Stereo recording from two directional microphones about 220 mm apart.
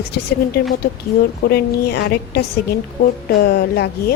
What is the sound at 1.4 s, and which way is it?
A woman's voice, 45° left (ahead or behind).